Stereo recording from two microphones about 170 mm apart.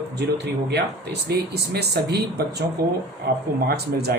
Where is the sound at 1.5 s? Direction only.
75° right (ahead or behind).